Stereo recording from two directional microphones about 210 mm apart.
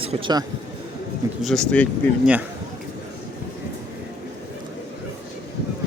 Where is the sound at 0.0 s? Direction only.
25° right (ahead or behind).